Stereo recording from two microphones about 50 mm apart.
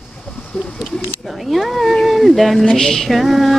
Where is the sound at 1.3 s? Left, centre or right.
Centre.